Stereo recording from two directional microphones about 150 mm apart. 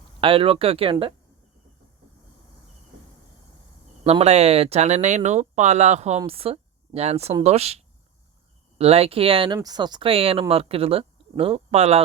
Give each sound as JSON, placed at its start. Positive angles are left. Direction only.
{"t": 0.2, "sound": "speech", "side_deg": -35}
{"t": 4.0, "sound": "speech", "side_deg": -45}